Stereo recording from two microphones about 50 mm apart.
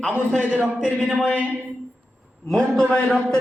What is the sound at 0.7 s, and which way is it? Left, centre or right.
Speech, centre.